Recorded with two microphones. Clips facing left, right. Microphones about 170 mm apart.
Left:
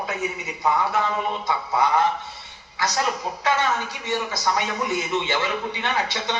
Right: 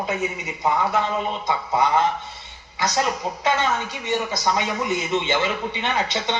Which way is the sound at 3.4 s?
20° right (ahead or behind).